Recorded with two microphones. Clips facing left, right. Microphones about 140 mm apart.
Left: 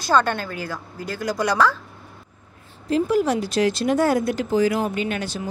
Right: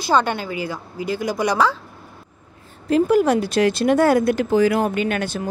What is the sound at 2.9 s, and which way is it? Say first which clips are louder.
Speech: right 4 dB; 60° right (ahead or behind).